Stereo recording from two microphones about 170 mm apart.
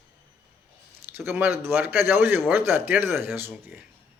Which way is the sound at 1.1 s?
15° right (ahead or behind).